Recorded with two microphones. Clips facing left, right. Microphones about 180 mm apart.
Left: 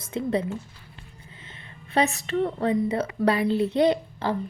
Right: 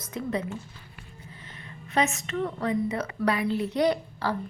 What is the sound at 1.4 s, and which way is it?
A woman's voice, 30° left (ahead or behind).